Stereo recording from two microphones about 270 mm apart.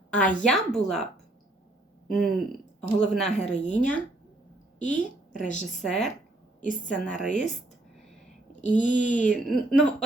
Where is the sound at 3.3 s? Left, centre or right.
Left.